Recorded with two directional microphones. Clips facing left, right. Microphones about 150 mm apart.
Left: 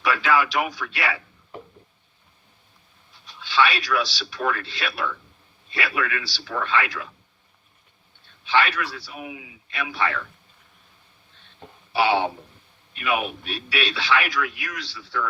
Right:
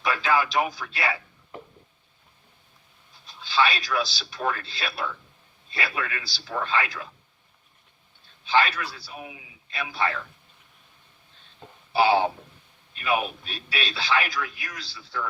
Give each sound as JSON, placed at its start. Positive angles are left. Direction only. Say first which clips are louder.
{"t": 0.0, "sound": "speech", "louder": "left 2 dB", "side_deg": -35}
{"t": 3.3, "sound": "speech", "louder": "left 2 dB", "side_deg": -35}
{"t": 8.4, "sound": "speech", "louder": "left 1 dB", "side_deg": -35}
{"t": 11.9, "sound": "speech", "louder": "right 1 dB", "side_deg": -35}